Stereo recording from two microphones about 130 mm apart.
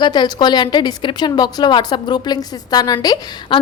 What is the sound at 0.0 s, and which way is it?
A woman's voice, 35° left (ahead or behind).